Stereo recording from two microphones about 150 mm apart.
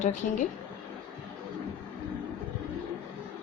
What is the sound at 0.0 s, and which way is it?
Speech, 55° left (ahead or behind).